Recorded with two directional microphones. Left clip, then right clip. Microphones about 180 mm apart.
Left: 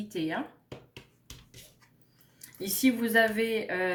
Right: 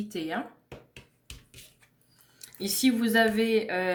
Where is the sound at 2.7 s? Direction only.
50° right (ahead or behind).